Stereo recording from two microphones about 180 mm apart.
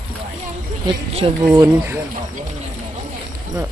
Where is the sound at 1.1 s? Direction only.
35° right (ahead or behind).